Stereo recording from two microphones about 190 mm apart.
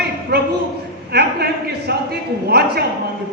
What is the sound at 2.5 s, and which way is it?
Speech, 55° right (ahead or behind).